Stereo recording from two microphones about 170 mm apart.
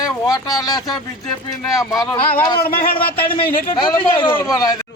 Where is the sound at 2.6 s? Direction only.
60° left (ahead or behind).